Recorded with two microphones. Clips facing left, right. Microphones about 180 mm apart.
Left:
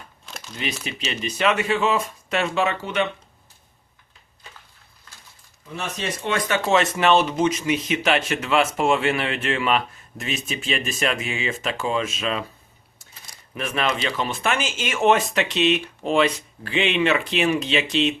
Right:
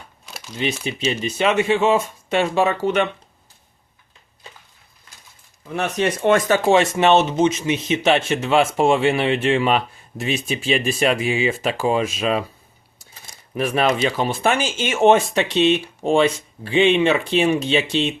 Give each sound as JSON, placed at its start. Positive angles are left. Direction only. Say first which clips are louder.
{"t": 0.3, "sound": "crumpling", "louder": "right 3 dB", "side_deg": -5}
{"t": 0.6, "sound": "speech", "louder": "right 7 dB", "side_deg": -25}
{"t": 5.7, "sound": "speech", "louder": "right 8 dB", "side_deg": -60}
{"t": 6.7, "sound": "speech", "louder": "right 3 dB", "side_deg": -25}
{"t": 13.6, "sound": "speech", "louder": "right 6 dB", "side_deg": -35}